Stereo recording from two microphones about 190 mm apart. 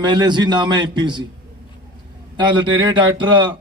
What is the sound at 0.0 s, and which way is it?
Speech, 20° right (ahead or behind).